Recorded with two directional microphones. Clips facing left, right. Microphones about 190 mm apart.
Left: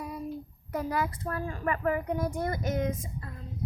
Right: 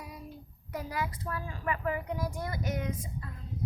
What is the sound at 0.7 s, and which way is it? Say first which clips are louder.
A child's voice: left 5 dB; 50° left (ahead or behind).